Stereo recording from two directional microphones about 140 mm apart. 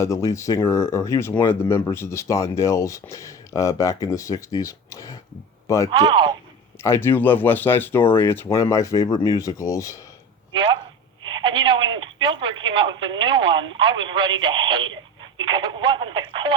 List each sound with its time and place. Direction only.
0.0 s speech: 20° left (ahead or behind)
5.9 s speech: 35° right (ahead or behind)
6.8 s speech: 20° left (ahead or behind)
11.4 s telephone: 35° right (ahead or behind)
15.4 s speech: 35° right (ahead or behind)